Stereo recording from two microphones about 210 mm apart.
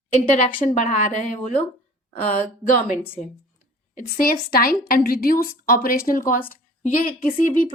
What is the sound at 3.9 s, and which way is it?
Speech, 45° left (ahead or behind).